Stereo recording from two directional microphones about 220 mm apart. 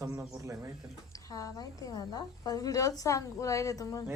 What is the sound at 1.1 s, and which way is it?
A woman's voice, 15° left (ahead or behind).